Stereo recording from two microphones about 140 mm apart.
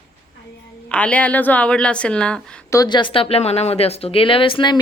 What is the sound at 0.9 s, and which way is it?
Speech, 10° left (ahead or behind).